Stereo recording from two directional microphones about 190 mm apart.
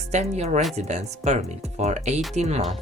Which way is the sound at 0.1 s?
35° right (ahead or behind).